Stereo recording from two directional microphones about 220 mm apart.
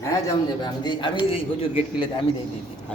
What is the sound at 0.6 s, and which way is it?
A man's voice, 20° left (ahead or behind).